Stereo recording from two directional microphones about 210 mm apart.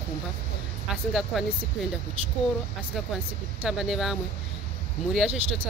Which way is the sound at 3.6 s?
Centre (ahead or behind).